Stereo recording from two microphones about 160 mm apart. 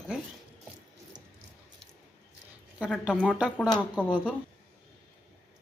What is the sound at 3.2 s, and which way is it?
Speech, 5° right (ahead or behind).